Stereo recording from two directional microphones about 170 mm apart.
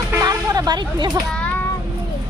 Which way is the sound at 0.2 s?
20° right (ahead or behind).